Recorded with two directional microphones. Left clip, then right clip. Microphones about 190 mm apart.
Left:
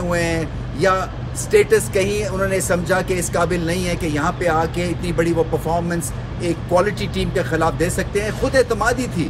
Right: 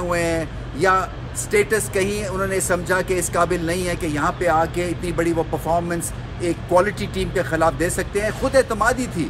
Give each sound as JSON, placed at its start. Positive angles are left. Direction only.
{"t": 0.1, "sound": "speech", "side_deg": -10}
{"t": 1.5, "sound": "speech", "side_deg": -10}